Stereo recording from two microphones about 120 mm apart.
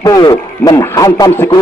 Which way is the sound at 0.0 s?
30° left (ahead or behind).